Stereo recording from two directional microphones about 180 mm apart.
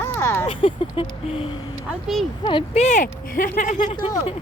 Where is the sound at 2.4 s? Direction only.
25° left (ahead or behind); by 3.9 s 45° left (ahead or behind).